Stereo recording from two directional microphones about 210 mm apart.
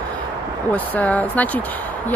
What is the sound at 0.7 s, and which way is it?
Speech, 5° left (ahead or behind).